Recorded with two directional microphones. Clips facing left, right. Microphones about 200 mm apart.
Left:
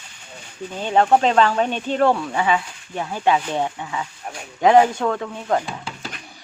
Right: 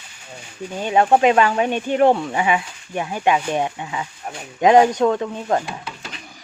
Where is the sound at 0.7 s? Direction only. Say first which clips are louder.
Right 1 dB; 10° right (ahead or behind).